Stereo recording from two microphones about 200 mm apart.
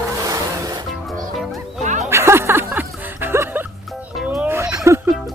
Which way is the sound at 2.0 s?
10° right (ahead or behind).